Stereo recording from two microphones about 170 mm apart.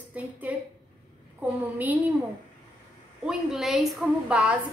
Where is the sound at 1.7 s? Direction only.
10° right (ahead or behind).